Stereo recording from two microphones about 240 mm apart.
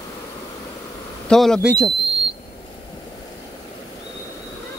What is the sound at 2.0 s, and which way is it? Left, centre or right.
Whistle, right.